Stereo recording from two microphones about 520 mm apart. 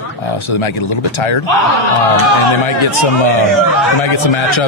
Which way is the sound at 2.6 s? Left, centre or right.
Left.